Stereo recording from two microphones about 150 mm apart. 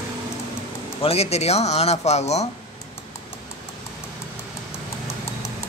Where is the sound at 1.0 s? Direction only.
45° left (ahead or behind).